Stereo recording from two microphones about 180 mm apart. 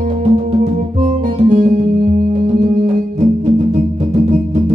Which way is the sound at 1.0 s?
45° right (ahead or behind).